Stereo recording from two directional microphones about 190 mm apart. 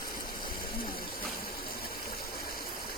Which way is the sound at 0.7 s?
50° left (ahead or behind).